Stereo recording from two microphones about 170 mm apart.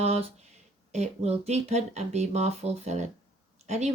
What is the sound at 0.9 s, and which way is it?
Speech, 40° right (ahead or behind).